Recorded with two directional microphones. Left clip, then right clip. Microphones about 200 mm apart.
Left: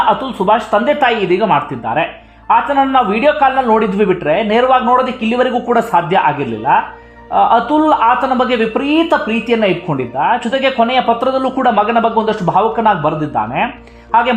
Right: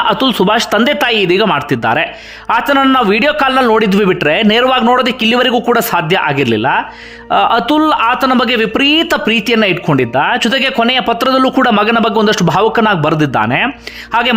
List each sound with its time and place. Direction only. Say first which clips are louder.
0.1 s speech: right 1 dB; 30° right (ahead or behind)